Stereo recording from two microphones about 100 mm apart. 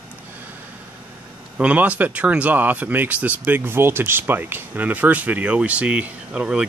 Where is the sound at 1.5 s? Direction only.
15° right (ahead or behind).